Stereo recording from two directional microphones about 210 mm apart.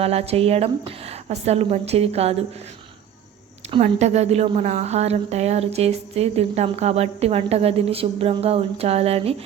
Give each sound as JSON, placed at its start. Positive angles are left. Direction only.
{"t": 0.0, "sound": "a woman's voice", "side_deg": -30}
{"t": 3.7, "sound": "a woman's voice", "side_deg": -30}